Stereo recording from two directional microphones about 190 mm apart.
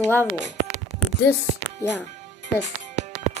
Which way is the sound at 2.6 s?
35° right (ahead or behind).